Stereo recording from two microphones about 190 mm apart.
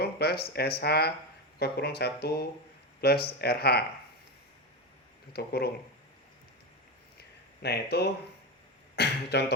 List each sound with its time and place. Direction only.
0.0 s speech: 55° left (ahead or behind)
5.3 s speech: 55° left (ahead or behind)
7.2 s a sound: 60° left (ahead or behind)
9.0 s speech: 60° left (ahead or behind)